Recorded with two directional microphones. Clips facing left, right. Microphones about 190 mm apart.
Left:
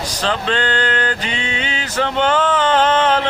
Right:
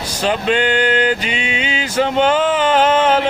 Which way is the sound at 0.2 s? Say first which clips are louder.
Right 4 dB; 10° right (ahead or behind).